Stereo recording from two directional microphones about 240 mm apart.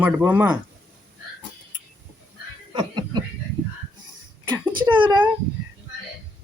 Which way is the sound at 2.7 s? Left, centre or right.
Centre.